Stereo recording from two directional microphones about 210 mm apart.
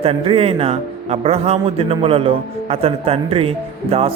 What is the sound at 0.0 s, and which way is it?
A man's voice, 25° right (ahead or behind).